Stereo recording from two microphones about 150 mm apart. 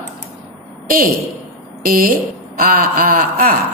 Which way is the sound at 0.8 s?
75° right (ahead or behind).